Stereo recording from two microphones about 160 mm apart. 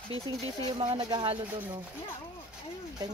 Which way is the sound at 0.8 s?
30° right (ahead or behind).